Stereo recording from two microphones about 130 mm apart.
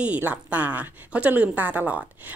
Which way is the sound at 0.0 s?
10° right (ahead or behind).